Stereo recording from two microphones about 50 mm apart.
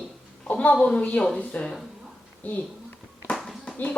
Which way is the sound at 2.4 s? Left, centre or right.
Left.